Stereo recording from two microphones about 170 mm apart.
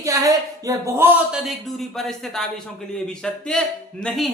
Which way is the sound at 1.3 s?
Centre (ahead or behind).